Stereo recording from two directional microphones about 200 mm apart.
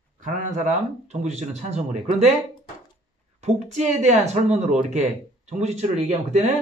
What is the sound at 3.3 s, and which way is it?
A man's voice, 35° right (ahead or behind).